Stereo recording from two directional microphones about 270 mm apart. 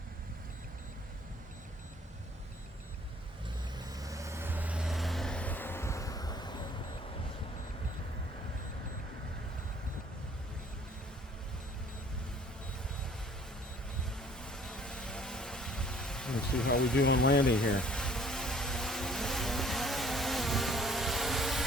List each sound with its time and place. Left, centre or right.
3.8 s vehicle: centre
14.2 s vehicle: centre
17.0 s speech: left
17.4 s a sound: centre